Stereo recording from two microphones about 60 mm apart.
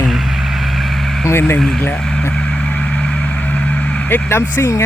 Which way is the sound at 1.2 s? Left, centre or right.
Left.